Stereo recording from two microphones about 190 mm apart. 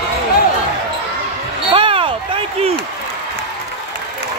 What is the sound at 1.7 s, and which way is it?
Basketball bounce, 30° right (ahead or behind).